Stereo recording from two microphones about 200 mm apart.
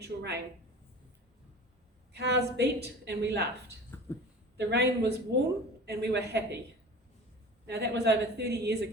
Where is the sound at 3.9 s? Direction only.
10° left (ahead or behind).